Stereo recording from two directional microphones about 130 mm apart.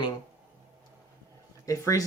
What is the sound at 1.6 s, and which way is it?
Speech, 25° left (ahead or behind).